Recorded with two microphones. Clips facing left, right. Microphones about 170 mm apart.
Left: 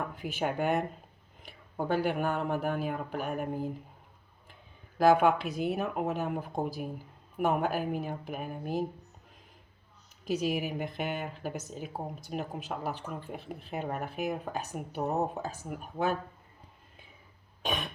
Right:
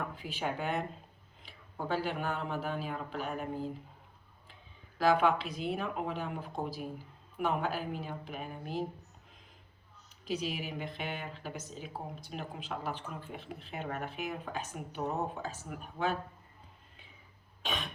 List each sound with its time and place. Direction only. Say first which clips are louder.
0.2 s speech: left 8 dB; 50° left (ahead or behind)
4.9 s speech: left 4 dB; 50° left (ahead or behind)
10.2 s speech: left 6 dB; 45° left (ahead or behind)